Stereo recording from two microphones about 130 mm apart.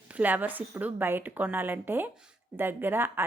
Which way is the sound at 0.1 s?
10° right (ahead or behind).